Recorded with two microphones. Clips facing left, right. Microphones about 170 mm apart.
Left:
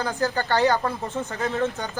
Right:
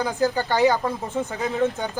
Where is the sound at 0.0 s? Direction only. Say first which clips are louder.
Right 3 dB; 15° right (ahead or behind).